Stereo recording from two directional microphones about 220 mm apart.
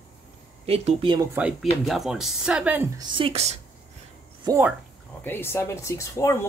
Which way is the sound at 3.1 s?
25° right (ahead or behind).